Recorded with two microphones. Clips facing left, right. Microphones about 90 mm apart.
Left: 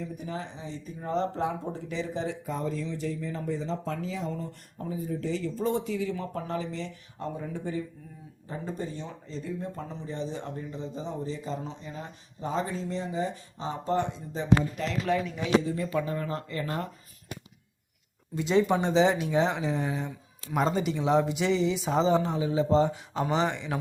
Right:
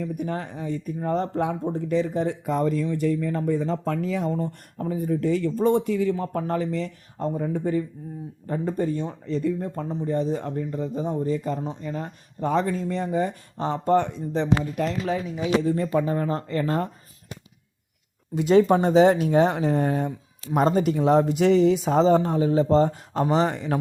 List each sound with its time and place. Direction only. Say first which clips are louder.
0.0 s speech: right 7 dB; 60° right (ahead or behind)
15.0 s speech: right 1 dB; 5° right (ahead or behind)
15.7 s speech: right 6 dB; 40° right (ahead or behind)
18.3 s speech: right 7 dB; 55° right (ahead or behind); by 23.7 s 40° right (ahead or behind)